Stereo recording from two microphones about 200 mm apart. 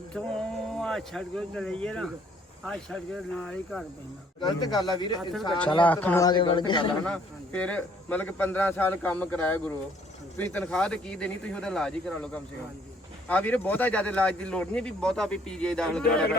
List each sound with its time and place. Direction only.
0.3 s speech: 5° left (ahead or behind)
4.4 s speech: 20° left (ahead or behind)
5.8 s speech: 10° left (ahead or behind)
6.2 s speech: 25° left (ahead or behind)
7.0 s speech: 5° left (ahead or behind)